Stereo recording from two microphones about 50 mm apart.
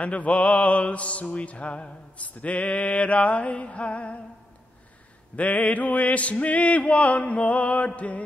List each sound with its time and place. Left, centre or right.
0.0 s mantra: left
5.3 s mantra: left